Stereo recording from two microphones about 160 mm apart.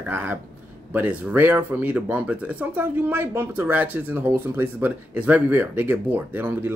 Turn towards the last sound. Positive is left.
turn(degrees=-10)  # may be behind; listen again after turning